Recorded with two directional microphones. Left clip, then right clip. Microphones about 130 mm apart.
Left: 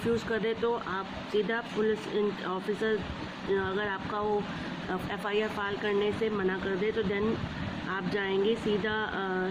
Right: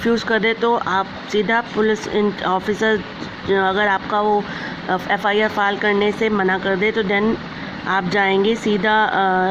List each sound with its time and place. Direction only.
0.3 s speech: 90° right
4.9 s speech: 75° right (ahead or behind)